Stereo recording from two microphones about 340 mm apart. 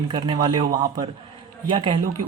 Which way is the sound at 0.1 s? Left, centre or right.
Centre.